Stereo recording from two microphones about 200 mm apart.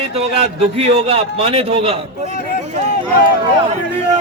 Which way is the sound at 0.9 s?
30° right (ahead or behind).